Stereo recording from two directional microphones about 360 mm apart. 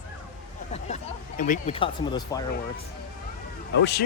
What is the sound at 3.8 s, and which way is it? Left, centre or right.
Speech, left.